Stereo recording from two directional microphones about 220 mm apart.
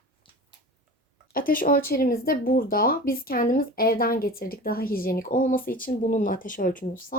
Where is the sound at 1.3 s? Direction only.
40° left (ahead or behind).